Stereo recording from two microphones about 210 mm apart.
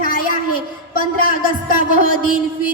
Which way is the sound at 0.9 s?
40° left (ahead or behind).